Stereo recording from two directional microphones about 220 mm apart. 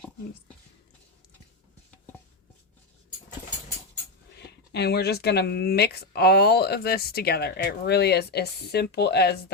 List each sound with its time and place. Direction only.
4.4 s speech: 50° left (ahead or behind)